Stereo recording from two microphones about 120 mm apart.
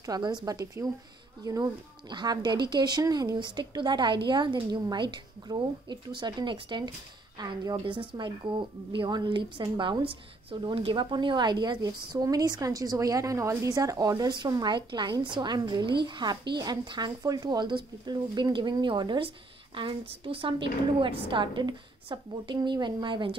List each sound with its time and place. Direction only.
0.0 s a woman's voice: 35° right (ahead or behind)